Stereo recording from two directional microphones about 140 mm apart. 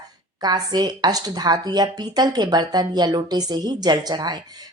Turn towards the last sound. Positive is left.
turn(degrees=-30)  # may be behind; listen again after turning